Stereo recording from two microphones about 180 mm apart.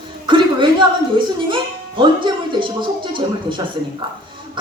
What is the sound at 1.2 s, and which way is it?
Speech, 30° right (ahead or behind).